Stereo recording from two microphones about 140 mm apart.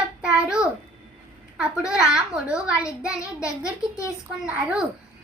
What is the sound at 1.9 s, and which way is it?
Speech, 5° right (ahead or behind).